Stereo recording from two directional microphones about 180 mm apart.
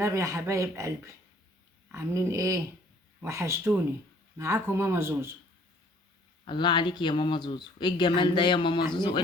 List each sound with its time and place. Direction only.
0.0 s speech: 15° right (ahead or behind)
6.4 s speech: 25° left (ahead or behind)